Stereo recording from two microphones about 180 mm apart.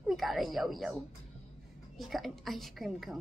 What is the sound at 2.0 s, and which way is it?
A woman's voice, centre (ahead or behind).